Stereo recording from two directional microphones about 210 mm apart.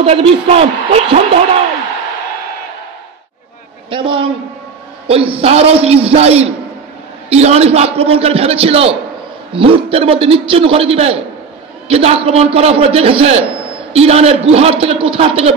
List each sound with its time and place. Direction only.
0.0 s a man's voice: 30° right (ahead or behind)
3.9 s a man's voice: 25° right (ahead or behind)